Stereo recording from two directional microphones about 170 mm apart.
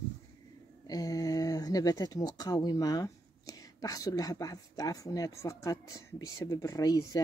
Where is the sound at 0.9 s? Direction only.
20° left (ahead or behind).